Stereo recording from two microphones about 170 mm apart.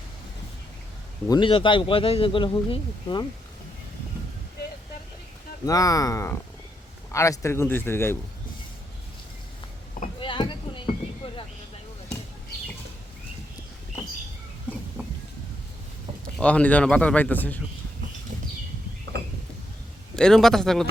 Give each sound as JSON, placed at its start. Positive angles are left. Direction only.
{"t": 1.3, "sound": "speech", "side_deg": 30}
{"t": 5.6, "sound": "a man's voice", "side_deg": 20}
{"t": 10.2, "sound": "a sound", "side_deg": 30}
{"t": 11.2, "sound": "vehicle", "side_deg": 35}
{"t": 16.4, "sound": "a man's voice", "side_deg": 5}
{"t": 20.1, "sound": "a man's voice", "side_deg": 5}